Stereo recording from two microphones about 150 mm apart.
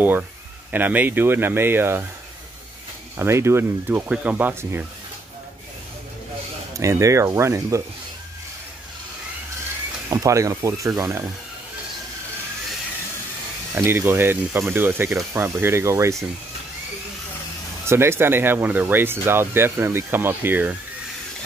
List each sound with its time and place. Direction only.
0.7 s speech: 10° right (ahead or behind)
3.2 s speech: 20° right (ahead or behind)
6.8 s speech: 20° right (ahead or behind)
10.0 s speech: 20° right (ahead or behind)
13.7 s speech: 15° right (ahead or behind)
17.8 s speech: 15° right (ahead or behind)